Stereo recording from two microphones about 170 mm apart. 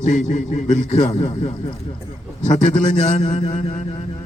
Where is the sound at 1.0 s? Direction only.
35° left (ahead or behind).